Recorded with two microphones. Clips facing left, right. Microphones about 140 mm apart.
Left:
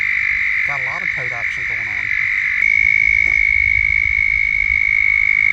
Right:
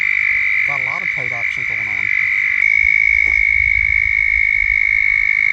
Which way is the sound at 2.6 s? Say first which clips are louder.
Even; 40° right (ahead or behind).